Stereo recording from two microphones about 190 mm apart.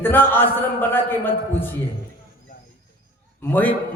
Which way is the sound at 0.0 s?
10° left (ahead or behind).